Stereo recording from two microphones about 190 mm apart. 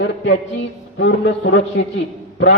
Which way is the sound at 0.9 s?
70° left (ahead or behind).